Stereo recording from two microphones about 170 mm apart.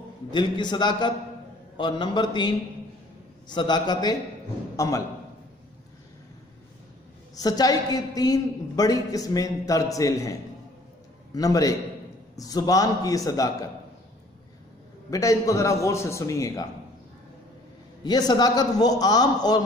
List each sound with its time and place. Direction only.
0.3 s a woman's voice: 25° left (ahead or behind)
7.3 s a woman's voice: 20° left (ahead or behind)
11.3 s a woman's voice: 20° left (ahead or behind)
15.0 s a woman's voice: 20° left (ahead or behind)
18.0 s a woman's voice: 25° left (ahead or behind)